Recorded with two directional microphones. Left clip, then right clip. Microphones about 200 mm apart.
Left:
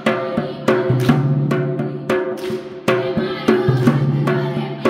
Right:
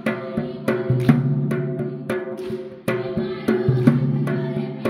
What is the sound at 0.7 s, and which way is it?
Music, 25° right (ahead or behind).